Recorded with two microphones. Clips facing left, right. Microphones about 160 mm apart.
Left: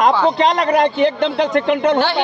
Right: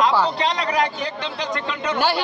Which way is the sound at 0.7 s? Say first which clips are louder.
Left 9 dB; 60° left (ahead or behind).